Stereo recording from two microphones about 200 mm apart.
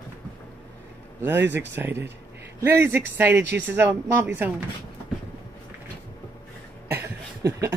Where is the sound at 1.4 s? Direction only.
60° right (ahead or behind).